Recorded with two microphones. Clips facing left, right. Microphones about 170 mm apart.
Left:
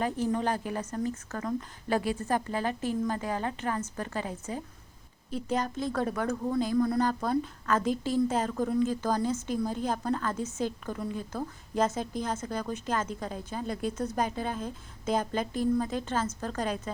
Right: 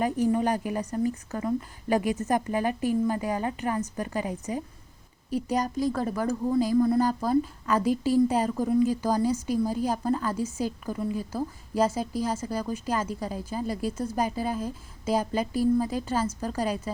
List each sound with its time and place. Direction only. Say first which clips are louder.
0.0 s speech: right 4 dB; 10° right (ahead or behind)